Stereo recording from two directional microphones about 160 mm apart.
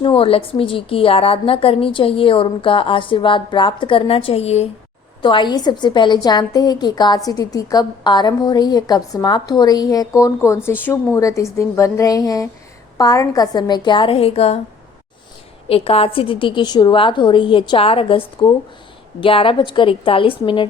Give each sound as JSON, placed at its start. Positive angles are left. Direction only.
{"t": 0.0, "sound": "a woman's voice", "side_deg": 35}
{"t": 5.2, "sound": "a woman's voice", "side_deg": 30}
{"t": 15.7, "sound": "a woman's voice", "side_deg": 35}